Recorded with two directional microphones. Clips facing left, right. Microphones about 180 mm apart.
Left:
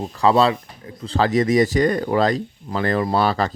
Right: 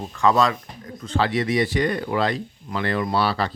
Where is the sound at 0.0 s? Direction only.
35° left (ahead or behind).